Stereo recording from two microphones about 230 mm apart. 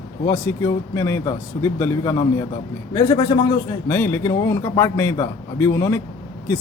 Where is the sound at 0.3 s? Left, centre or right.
Centre.